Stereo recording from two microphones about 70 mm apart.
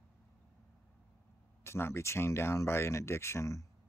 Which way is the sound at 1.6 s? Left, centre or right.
Left.